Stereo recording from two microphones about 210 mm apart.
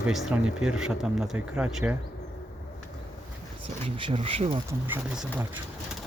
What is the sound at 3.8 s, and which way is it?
Speech, 25° right (ahead or behind).